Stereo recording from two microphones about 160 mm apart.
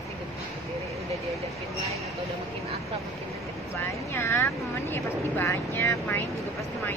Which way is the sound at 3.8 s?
15° left (ahead or behind).